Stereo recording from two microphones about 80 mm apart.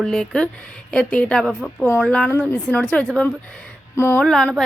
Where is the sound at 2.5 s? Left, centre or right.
Left.